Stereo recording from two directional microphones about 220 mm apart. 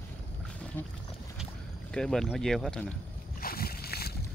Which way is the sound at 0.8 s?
10° left (ahead or behind).